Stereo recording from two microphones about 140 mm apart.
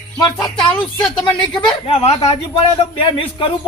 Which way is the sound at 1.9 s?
50° left (ahead or behind).